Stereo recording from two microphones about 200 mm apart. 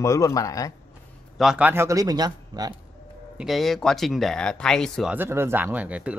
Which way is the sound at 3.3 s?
Centre (ahead or behind).